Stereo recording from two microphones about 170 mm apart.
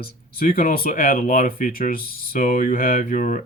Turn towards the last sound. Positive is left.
turn(degrees=50)  # may be behind; listen again after turning